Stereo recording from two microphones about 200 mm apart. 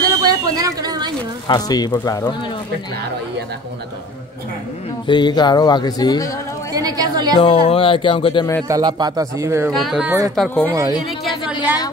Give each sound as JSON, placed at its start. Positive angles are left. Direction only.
{"t": 0.1, "sound": "a sound", "side_deg": -20}
{"t": 1.5, "sound": "speech", "side_deg": 20}
{"t": 5.0, "sound": "speech", "side_deg": 20}
{"t": 6.7, "sound": "a woman's voice", "side_deg": -20}
{"t": 7.3, "sound": "speech", "side_deg": 30}
{"t": 8.6, "sound": "a man's voice", "side_deg": -20}
{"t": 9.7, "sound": "speech", "side_deg": 0}
{"t": 10.3, "sound": "speech", "side_deg": 5}